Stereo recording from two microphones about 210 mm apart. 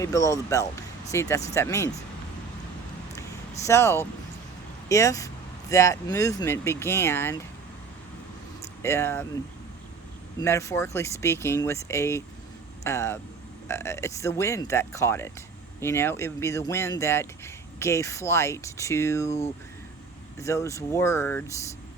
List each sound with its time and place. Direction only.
0.0 s speech: 15° left (ahead or behind)
3.7 s speech: 15° left (ahead or behind)
8.8 s speech: 10° left (ahead or behind)
10.4 s speech: 15° left (ahead or behind)
20.4 s speech: 15° left (ahead or behind)